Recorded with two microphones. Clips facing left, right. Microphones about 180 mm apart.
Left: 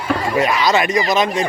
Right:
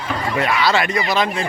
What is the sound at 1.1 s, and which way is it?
Speech, 20° left (ahead or behind).